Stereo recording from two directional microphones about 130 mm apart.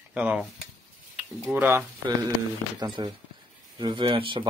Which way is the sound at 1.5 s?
10° right (ahead or behind).